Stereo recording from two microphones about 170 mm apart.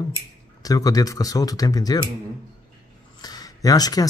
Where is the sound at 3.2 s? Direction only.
20° left (ahead or behind).